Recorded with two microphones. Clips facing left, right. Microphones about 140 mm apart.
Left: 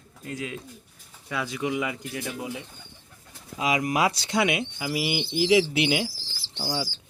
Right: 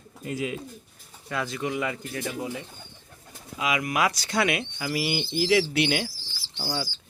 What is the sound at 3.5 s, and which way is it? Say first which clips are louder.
Speech: left 2 dB; 35° left (ahead or behind).